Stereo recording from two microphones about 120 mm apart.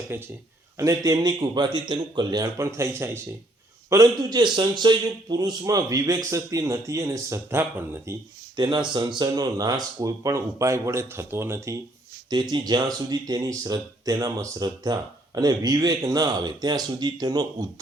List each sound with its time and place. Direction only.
0.1 s speech: 20° right (ahead or behind)
0.8 s speech: 30° right (ahead or behind)
3.8 s a man's voice: 30° right (ahead or behind)
8.5 s a man's voice: 35° right (ahead or behind)
12.3 s speech: 35° right (ahead or behind)